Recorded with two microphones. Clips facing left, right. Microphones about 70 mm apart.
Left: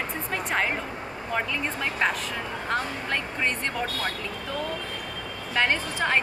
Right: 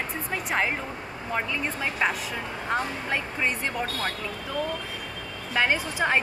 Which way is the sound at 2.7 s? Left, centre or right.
Centre.